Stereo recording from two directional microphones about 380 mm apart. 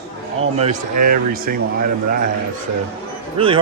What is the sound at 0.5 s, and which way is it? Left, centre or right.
Speech, centre.